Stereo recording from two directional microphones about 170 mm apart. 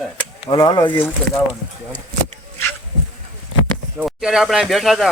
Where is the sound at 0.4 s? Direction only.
25° left (ahead or behind).